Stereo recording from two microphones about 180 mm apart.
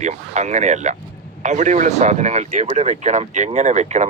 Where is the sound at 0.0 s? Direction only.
40° right (ahead or behind).